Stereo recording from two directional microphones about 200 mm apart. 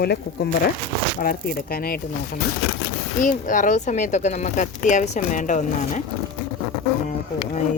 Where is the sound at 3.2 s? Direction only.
40° left (ahead or behind).